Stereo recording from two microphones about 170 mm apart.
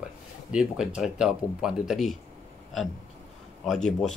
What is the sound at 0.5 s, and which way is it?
Speech, 5° right (ahead or behind).